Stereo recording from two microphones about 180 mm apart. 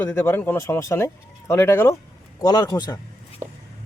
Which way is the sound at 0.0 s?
10° left (ahead or behind).